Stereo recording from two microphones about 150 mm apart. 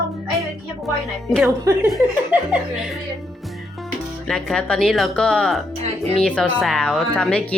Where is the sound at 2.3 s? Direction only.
10° right (ahead or behind).